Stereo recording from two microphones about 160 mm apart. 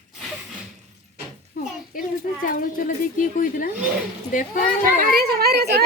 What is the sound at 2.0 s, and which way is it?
Speech, 60° left (ahead or behind).